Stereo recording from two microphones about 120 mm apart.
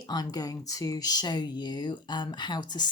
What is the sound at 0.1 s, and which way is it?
Speech, 30° left (ahead or behind).